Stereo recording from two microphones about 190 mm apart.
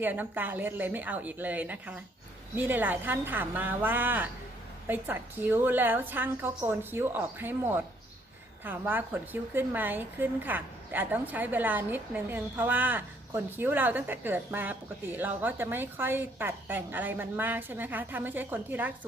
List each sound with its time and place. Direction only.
0.0 s a woman's voice: 10° right (ahead or behind)